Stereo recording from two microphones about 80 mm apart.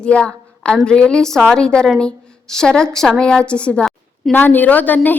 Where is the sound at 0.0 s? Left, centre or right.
Centre.